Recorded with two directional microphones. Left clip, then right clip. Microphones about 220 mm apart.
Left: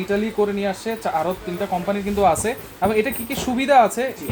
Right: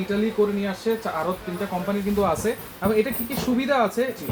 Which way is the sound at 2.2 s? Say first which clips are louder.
Left 8 dB; 50° left (ahead or behind).